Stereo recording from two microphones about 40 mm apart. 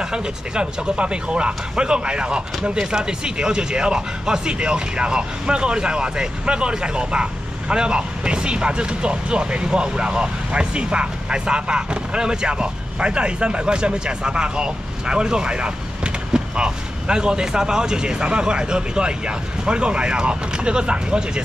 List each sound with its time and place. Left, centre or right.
0.0 s speech: right